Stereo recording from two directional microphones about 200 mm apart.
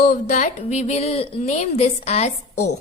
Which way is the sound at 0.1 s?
40° left (ahead or behind).